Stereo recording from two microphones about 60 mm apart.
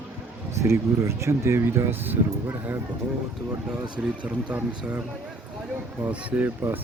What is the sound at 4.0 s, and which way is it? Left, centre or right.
Speech, right.